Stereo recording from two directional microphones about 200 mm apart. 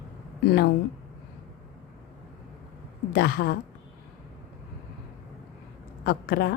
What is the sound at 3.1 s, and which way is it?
Speech, 50° left (ahead or behind).